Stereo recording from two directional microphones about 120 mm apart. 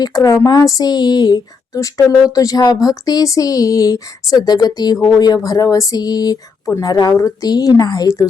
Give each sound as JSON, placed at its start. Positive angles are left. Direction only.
{"t": 0.0, "sound": "speech", "side_deg": 30}